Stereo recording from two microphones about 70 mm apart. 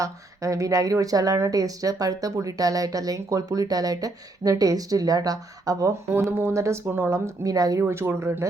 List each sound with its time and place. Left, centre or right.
0.0 s speech: right
6.5 s speech: right
6.8 s speech: right
7.4 s speech: right
7.9 s speech: right